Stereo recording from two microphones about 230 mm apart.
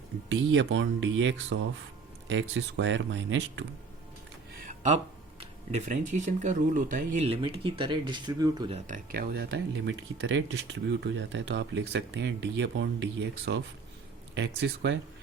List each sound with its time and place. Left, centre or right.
0.3 s speech: right
4.6 s a sound: right
5.4 s speech: right
8.9 s speech: right